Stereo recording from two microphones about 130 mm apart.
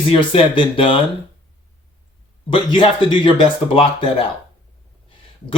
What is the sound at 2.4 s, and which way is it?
Speech, 40° left (ahead or behind).